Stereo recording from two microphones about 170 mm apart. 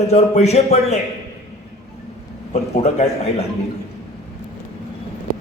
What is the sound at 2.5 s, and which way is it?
Speech, 40° left (ahead or behind).